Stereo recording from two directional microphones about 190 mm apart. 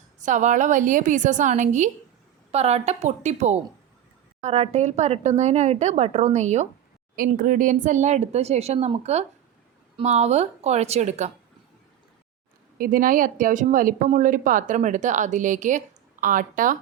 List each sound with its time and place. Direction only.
0.2 s speech: 40° right (ahead or behind)
12.8 s a woman's voice: 45° right (ahead or behind)